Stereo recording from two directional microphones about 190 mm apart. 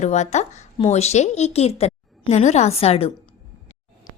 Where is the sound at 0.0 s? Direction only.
35° left (ahead or behind).